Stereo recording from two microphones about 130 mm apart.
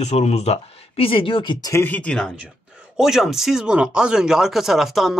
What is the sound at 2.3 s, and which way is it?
Speech, 5° right (ahead or behind).